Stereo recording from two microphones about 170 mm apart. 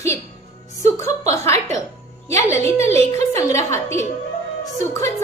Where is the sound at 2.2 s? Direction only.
15° left (ahead or behind).